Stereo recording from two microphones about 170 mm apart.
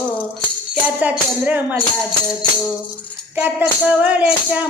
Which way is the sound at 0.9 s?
10° right (ahead or behind).